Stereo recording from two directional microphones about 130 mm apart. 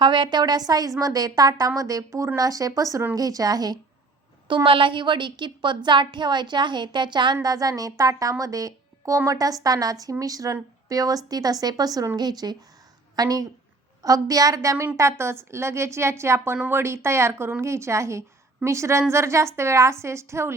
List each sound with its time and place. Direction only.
0.0 s a woman's voice: 35° right (ahead or behind)
4.4 s a woman's voice: 40° right (ahead or behind); by 20.5 s 20° right (ahead or behind)